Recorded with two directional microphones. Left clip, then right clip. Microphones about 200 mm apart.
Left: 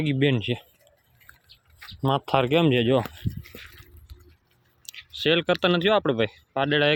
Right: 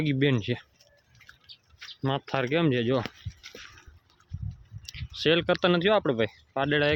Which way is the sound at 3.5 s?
20° left (ahead or behind).